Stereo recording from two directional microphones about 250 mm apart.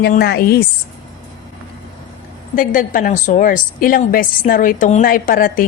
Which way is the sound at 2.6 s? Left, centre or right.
Left.